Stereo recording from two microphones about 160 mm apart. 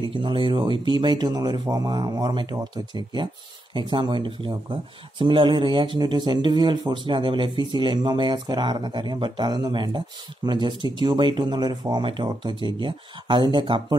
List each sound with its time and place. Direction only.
0.0 s speech: 30° right (ahead or behind)